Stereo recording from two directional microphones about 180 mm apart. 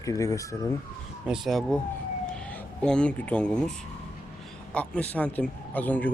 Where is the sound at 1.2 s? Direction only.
Centre (ahead or behind).